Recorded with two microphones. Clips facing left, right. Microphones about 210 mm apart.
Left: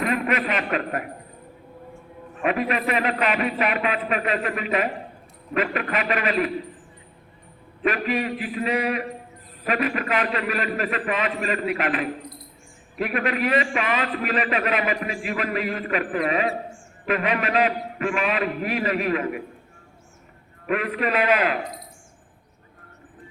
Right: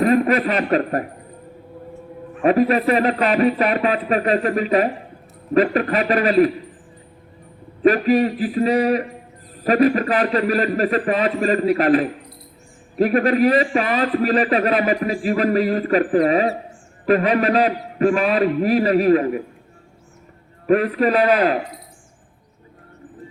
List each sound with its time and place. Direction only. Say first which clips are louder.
0.0 s speech: right 8 dB; 35° right (ahead or behind)
2.4 s a man's voice: right 8 dB; 35° right (ahead or behind)
7.8 s a man's voice: right 9 dB; 35° right (ahead or behind)
20.7 s a man's voice: right 8 dB; 35° right (ahead or behind)